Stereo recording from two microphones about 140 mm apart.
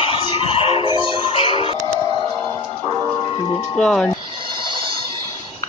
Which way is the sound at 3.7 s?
5° left (ahead or behind).